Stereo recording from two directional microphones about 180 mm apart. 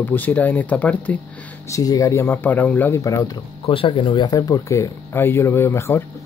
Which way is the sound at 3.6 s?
30° left (ahead or behind).